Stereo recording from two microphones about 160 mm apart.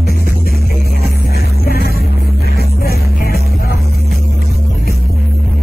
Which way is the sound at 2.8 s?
75° left (ahead or behind).